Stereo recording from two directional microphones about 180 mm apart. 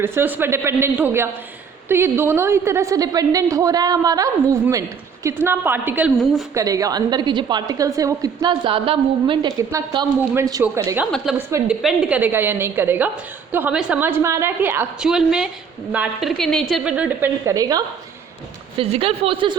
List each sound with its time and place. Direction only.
0.0 s a woman's voice: 10° right (ahead or behind)
11.0 s a woman's voice: centre (ahead or behind); by 17.8 s 20° right (ahead or behind)
18.8 s a woman's voice: 30° right (ahead or behind)